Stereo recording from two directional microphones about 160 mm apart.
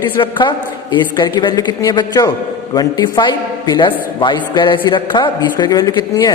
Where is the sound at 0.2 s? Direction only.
30° left (ahead or behind).